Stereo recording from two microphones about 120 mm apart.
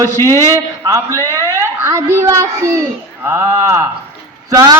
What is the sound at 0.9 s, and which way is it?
A child's voice, 25° right (ahead or behind).